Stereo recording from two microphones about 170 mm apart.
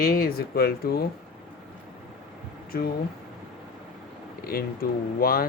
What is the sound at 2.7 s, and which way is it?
Speech, 60° left (ahead or behind).